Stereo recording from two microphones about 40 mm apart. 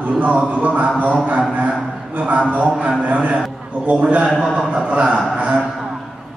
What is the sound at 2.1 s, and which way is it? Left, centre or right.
A man's voice, right.